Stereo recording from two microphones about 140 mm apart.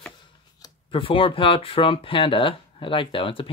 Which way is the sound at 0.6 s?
35° left (ahead or behind).